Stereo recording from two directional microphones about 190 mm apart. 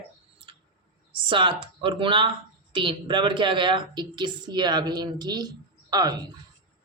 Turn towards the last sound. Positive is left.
turn(degrees=-20)  # may be behind; listen again after turning